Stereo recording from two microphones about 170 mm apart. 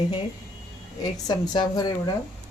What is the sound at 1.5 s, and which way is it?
Speech, 25° left (ahead or behind).